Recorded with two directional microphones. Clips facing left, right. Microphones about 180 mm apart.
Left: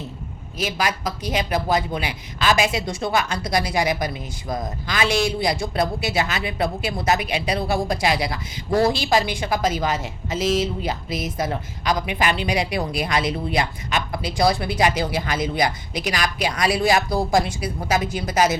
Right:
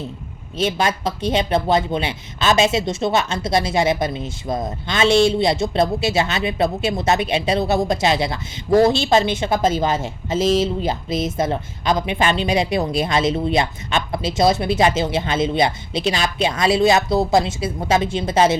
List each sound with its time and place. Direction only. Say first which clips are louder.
0.5 s speech: right 4 dB; 25° right (ahead or behind)